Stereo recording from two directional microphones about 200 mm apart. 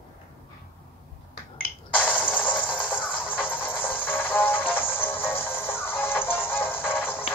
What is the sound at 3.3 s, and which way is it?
Music, 10° left (ahead or behind).